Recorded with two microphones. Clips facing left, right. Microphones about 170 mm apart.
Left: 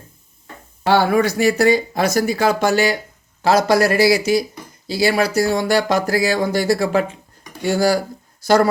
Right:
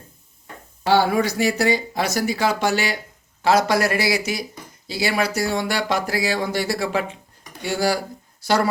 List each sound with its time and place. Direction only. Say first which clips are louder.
0.9 s speech: left 3 dB; 60° left (ahead or behind)